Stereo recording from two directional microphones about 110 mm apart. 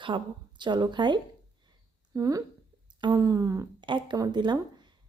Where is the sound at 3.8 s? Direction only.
45° right (ahead or behind).